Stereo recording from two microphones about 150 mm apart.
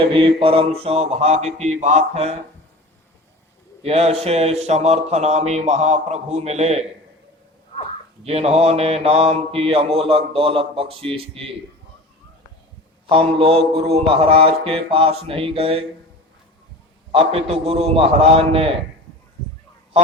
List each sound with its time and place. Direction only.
0.0 s mantra: 35° right (ahead or behind)
1.5 s speech: 50° right (ahead or behind)
3.8 s speech: 45° right (ahead or behind)
8.2 s mantra: 45° right (ahead or behind)
13.1 s mantra: 40° right (ahead or behind)
17.1 s mantra: 40° right (ahead or behind)